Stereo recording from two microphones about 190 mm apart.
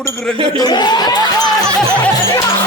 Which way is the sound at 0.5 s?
20° left (ahead or behind).